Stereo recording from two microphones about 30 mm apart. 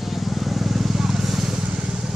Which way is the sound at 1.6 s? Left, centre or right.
Right.